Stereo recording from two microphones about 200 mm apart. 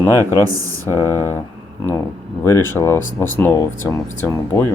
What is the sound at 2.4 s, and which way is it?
Speech, 10° left (ahead or behind).